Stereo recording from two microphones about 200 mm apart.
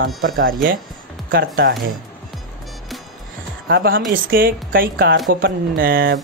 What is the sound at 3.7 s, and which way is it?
Speech, 50° right (ahead or behind).